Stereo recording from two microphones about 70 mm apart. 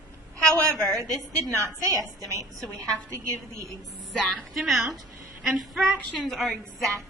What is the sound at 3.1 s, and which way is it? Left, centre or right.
Speech, right.